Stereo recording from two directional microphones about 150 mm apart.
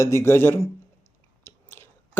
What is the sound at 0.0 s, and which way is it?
Speech, 20° left (ahead or behind).